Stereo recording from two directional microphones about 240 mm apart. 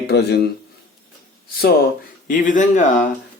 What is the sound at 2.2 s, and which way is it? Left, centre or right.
Speech, left.